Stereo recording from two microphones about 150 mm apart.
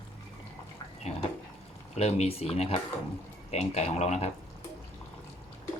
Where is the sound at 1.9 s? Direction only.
45° left (ahead or behind).